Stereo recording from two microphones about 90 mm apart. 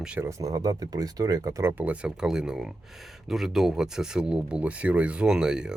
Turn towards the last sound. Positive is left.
turn(degrees=-10)  # may be behind; listen again after turning